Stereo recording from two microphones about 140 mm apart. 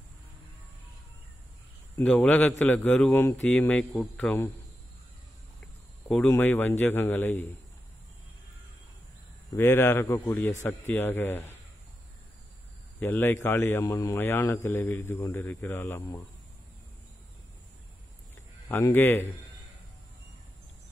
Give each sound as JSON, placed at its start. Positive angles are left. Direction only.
{"t": 2.0, "sound": "speech", "side_deg": 10}
{"t": 5.6, "sound": "cricket", "side_deg": 5}
{"t": 6.3, "sound": "speech", "side_deg": 15}
{"t": 9.5, "sound": "speech", "side_deg": 20}
{"t": 13.0, "sound": "speech", "side_deg": 15}
{"t": 18.7, "sound": "speech", "side_deg": 15}